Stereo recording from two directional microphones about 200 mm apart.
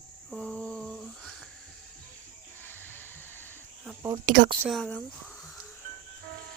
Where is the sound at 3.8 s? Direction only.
10° right (ahead or behind).